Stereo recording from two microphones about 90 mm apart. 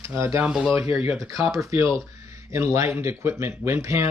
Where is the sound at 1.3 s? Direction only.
40° right (ahead or behind).